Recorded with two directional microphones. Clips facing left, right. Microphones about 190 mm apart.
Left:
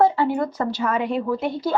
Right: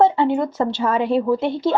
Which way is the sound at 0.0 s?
25° right (ahead or behind).